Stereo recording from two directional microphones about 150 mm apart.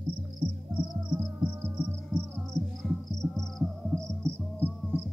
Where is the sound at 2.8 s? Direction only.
Centre (ahead or behind).